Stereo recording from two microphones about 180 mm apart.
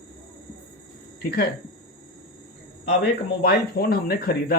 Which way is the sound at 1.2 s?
60° left (ahead or behind).